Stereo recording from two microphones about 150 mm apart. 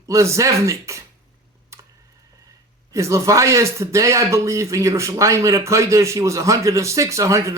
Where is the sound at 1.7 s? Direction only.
20° right (ahead or behind).